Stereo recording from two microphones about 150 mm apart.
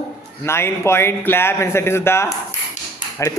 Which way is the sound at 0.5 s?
15° left (ahead or behind).